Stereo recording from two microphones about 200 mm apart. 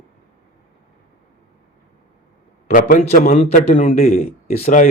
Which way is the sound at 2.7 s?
40° left (ahead or behind).